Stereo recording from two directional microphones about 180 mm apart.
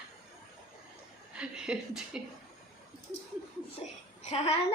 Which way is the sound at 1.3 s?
5° right (ahead or behind).